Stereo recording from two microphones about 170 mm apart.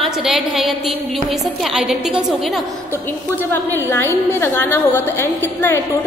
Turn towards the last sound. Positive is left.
turn(degrees=15)  # may be behind; listen again after turning